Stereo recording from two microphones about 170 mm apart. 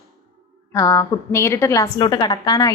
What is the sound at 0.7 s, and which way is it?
A woman's voice, 20° left (ahead or behind).